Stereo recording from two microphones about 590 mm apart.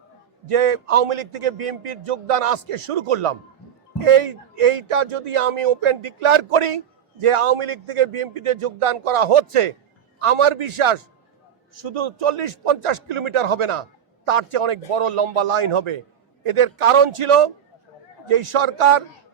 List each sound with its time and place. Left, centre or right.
0.4 s a man's voice: right
8.5 s a man's voice: right